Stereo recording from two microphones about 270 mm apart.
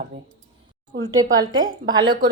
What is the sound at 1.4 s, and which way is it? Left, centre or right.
Speech, centre.